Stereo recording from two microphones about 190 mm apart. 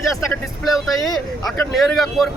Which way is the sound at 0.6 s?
Centre (ahead or behind).